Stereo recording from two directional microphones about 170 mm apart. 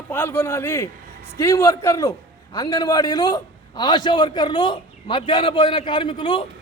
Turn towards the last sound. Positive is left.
turn(degrees=30)  # may be behind; listen again after turning